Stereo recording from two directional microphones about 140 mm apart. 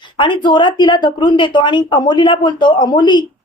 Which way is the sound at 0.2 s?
35° left (ahead or behind).